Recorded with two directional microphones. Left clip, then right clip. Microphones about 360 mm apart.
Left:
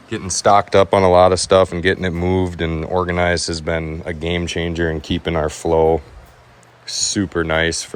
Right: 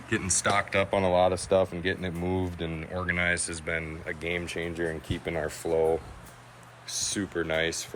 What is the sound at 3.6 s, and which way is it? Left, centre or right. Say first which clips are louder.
Speech: left 10 dB; left.